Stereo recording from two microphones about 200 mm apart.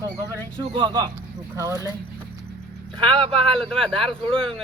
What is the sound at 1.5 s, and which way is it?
Speech, 15° right (ahead or behind).